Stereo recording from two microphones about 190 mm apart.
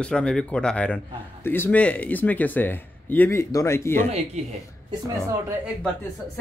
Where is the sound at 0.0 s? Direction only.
5° left (ahead or behind).